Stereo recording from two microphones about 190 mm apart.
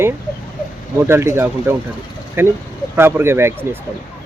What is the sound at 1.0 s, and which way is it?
Speech, 15° right (ahead or behind).